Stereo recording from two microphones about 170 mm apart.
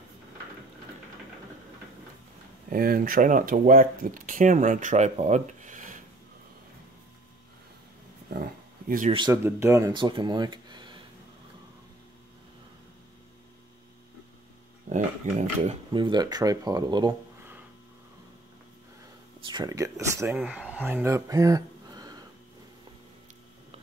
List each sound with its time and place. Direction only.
2.7 s speech: 55° right (ahead or behind)
8.8 s speech: 55° right (ahead or behind)
9.1 s speech: 25° right (ahead or behind)
9.4 s speech: 15° right (ahead or behind)
9.9 s speech: 25° right (ahead or behind)
15.3 s speech: 45° right (ahead or behind)
15.9 s speech: 25° right (ahead or behind)
19.4 s speech: 25° right (ahead or behind)